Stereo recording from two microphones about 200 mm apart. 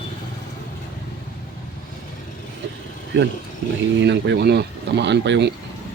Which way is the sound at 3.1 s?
60° right (ahead or behind).